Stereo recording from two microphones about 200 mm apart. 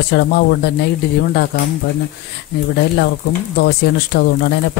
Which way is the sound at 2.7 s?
50° left (ahead or behind).